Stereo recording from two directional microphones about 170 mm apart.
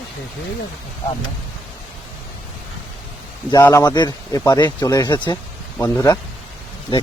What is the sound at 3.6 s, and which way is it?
Speech, 20° left (ahead or behind).